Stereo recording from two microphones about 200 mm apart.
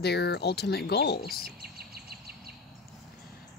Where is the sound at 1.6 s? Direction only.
50° right (ahead or behind).